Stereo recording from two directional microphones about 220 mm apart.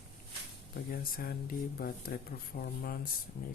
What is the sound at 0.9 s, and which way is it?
Speech, 40° left (ahead or behind).